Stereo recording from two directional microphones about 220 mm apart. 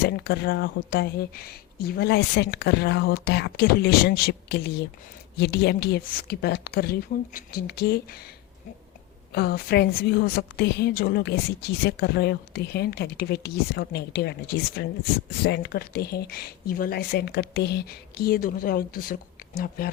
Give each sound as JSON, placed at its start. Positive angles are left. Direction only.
{"t": 0.0, "sound": "a woman's voice", "side_deg": 45}
{"t": 9.3, "sound": "a woman's voice", "side_deg": 45}